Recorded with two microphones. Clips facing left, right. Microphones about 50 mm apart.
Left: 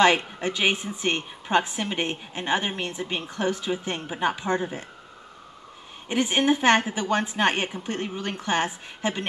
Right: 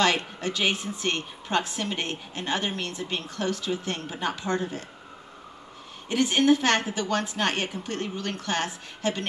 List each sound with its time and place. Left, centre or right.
0.0 s a woman's voice: left
6.0 s a woman's voice: left